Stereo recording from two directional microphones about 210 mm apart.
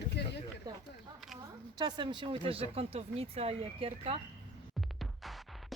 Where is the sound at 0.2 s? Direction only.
50° left (ahead or behind).